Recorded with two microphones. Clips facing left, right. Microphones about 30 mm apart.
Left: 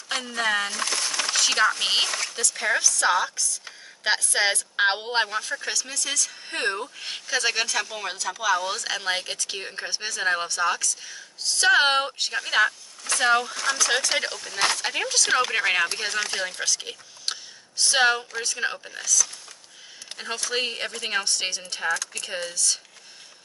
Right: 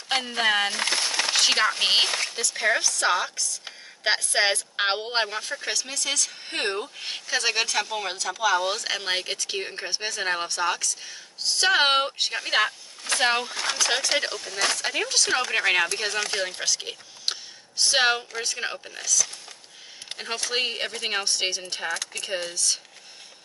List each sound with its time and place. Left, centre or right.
0.1 s a sound: right
3.0 s a woman's voice: centre
13.9 s a woman's voice: centre
18.7 s speech: centre
20.2 s a woman's voice: centre